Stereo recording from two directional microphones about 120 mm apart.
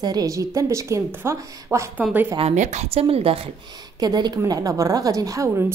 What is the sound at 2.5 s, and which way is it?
A woman's voice, 75° right (ahead or behind).